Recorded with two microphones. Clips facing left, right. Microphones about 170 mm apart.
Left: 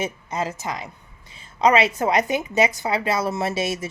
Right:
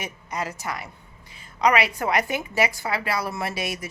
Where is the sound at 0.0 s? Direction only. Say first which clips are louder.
Left 5 dB; 25° left (ahead or behind).